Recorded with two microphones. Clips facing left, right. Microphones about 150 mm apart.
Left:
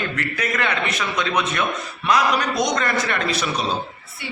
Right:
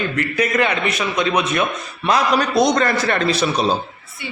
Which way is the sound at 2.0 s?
30° right (ahead or behind).